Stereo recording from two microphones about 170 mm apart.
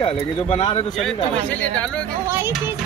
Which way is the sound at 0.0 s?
35° left (ahead or behind).